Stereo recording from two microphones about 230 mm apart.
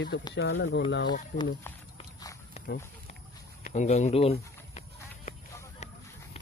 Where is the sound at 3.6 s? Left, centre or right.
Left.